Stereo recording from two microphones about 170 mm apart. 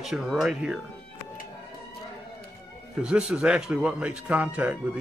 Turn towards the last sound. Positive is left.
turn(degrees=-10)  # may be behind; listen again after turning